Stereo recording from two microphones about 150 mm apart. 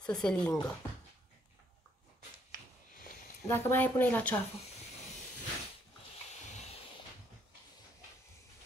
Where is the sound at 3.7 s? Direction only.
10° left (ahead or behind).